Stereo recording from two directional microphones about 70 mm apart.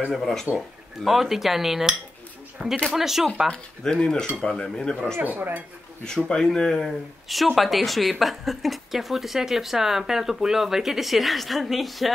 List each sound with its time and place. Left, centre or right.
0.1 s speech: centre
3.4 s speech: centre
5.2 s speech: right
6.0 s speech: centre